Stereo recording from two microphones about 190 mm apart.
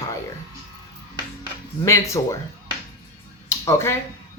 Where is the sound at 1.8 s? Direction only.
15° left (ahead or behind).